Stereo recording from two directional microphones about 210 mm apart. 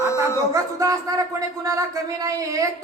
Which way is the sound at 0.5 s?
15° right (ahead or behind).